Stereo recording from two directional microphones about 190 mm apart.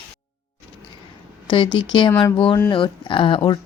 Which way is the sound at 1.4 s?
25° left (ahead or behind).